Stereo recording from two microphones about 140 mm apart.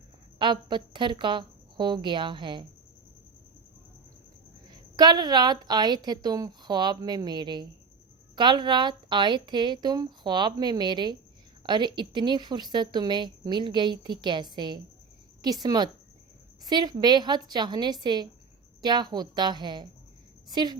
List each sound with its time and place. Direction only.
0.3 s a woman's voice: 35° right (ahead or behind)
4.7 s a woman's voice: 30° right (ahead or behind)